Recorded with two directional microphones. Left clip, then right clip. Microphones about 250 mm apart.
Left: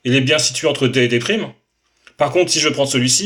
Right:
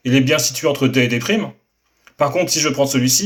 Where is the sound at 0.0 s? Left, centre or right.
Left.